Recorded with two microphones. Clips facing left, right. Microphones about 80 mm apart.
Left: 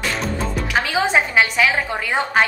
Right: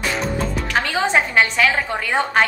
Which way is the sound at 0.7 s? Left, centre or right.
Centre.